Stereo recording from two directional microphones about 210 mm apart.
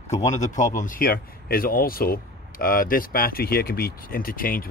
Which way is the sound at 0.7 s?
40° left (ahead or behind).